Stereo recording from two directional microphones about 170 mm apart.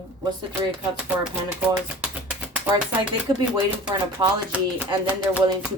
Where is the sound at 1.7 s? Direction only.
10° right (ahead or behind).